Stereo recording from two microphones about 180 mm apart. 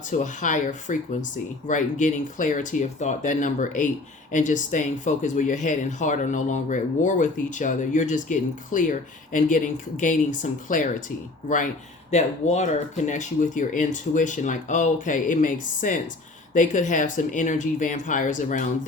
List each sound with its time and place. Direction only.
0.1 s speech: 45° left (ahead or behind)